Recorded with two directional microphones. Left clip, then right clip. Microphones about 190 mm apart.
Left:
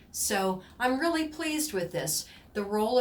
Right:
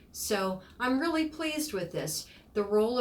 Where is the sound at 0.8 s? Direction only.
25° left (ahead or behind).